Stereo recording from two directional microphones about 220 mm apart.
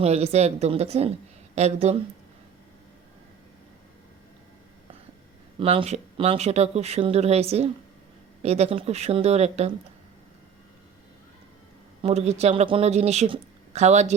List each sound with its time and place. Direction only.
0.0 s speech: 30° right (ahead or behind)
5.5 s speech: 25° right (ahead or behind)
12.0 s speech: 30° right (ahead or behind)